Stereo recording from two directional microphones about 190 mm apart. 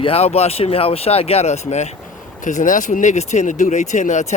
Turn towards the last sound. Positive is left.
turn(degrees=40)  # may be behind; listen again after turning